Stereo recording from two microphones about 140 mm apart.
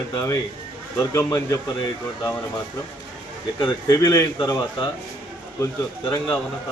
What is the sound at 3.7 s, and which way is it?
A man's voice, 25° left (ahead or behind).